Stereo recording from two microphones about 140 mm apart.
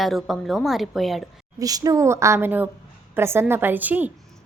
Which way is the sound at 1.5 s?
25° right (ahead or behind).